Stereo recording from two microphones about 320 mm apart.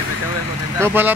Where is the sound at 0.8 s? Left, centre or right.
Centre.